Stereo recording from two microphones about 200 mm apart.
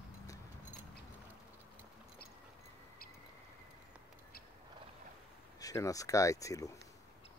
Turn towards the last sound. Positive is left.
turn(degrees=15)  # may be behind; listen again after turning